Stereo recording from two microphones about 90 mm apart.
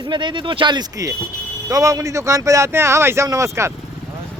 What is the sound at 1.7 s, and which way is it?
Speech, 40° right (ahead or behind).